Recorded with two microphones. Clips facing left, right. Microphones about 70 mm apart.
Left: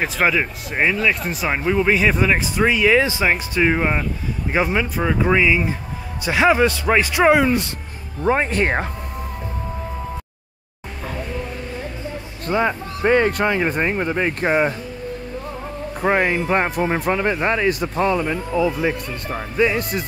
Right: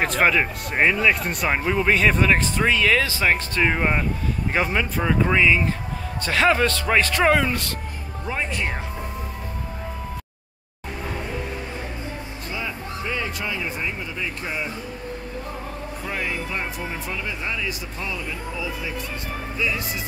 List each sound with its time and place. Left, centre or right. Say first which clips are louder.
0.0 s a man's voice: even; centre
8.3 s speech: left 9 dB; left
12.4 s speech: left 12 dB; left
16.0 s speech: left 11 dB; left